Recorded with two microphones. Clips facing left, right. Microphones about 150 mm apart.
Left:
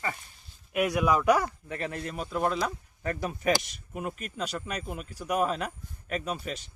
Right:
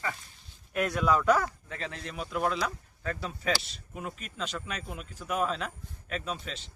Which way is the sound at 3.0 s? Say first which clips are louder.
Left 4 dB; 15° left (ahead or behind).